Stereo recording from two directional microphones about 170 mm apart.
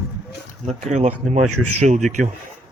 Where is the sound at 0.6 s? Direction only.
45° right (ahead or behind).